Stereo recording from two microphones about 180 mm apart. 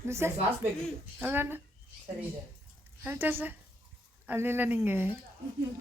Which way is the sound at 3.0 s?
10° right (ahead or behind).